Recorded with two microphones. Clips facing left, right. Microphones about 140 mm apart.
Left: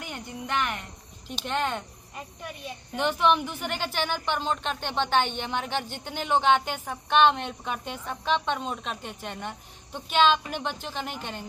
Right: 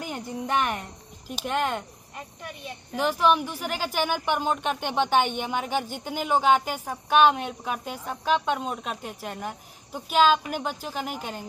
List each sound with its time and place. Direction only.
0.0 s music: 40° right (ahead or behind)
1.2 s speech: 5° right (ahead or behind)